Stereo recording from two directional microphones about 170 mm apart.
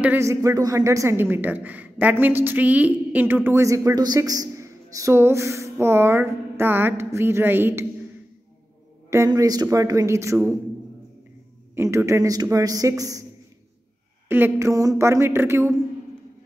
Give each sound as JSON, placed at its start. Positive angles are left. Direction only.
{"t": 0.0, "sound": "a woman's voice", "side_deg": -15}
{"t": 9.1, "sound": "a man's voice", "side_deg": -20}
{"t": 11.7, "sound": "a man's voice", "side_deg": -15}
{"t": 14.3, "sound": "a woman's voice", "side_deg": -15}